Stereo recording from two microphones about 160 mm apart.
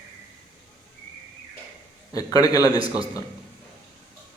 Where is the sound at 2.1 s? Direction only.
25° left (ahead or behind).